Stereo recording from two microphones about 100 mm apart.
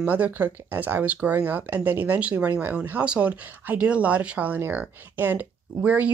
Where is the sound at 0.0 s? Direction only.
15° right (ahead or behind).